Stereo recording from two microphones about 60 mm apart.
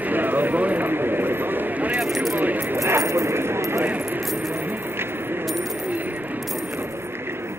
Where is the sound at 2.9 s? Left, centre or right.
Right.